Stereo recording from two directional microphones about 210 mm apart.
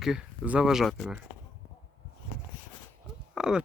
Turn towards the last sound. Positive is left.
turn(degrees=-5)  # may be behind; listen again after turning